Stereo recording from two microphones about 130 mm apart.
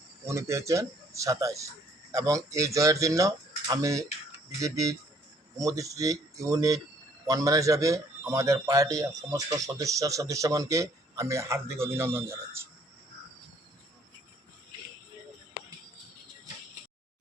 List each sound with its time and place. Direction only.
0.3 s a man's voice: 25° right (ahead or behind)